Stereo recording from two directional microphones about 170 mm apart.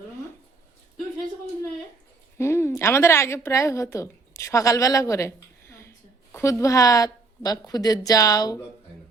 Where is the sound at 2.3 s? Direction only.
15° left (ahead or behind).